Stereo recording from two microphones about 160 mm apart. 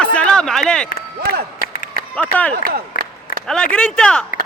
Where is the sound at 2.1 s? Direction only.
10° left (ahead or behind).